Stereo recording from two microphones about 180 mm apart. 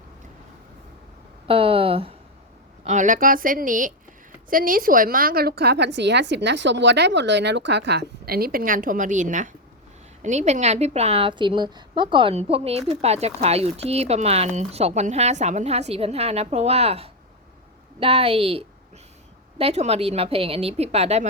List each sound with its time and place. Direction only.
1.5 s speech: 30° right (ahead or behind)
2.8 s a woman's voice: 40° right (ahead or behind)